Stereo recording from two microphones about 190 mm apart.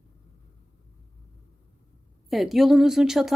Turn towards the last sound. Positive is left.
turn(degrees=0)  # may be behind; listen again after turning